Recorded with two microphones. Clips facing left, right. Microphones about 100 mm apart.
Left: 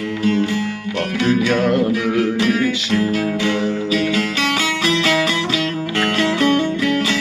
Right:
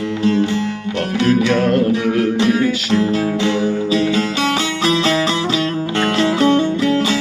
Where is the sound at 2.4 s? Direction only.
25° right (ahead or behind).